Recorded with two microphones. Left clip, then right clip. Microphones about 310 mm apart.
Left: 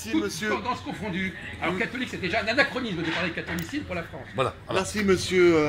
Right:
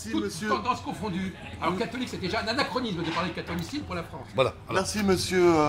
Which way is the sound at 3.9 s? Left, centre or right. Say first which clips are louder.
Right 3 dB; centre.